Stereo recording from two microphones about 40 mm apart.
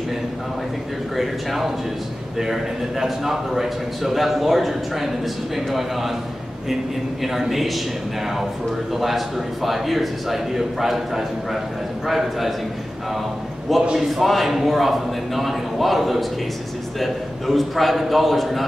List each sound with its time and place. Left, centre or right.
1.1 s a man's voice: centre
7.3 s a man's voice: centre
8.9 s a man's voice: centre
13.9 s a man's voice: centre